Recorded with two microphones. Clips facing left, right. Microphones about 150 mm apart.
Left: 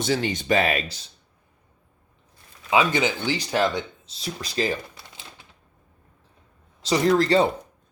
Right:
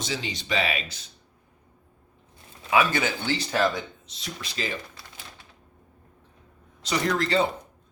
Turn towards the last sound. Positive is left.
turn(degrees=35)  # may be behind; listen again after turning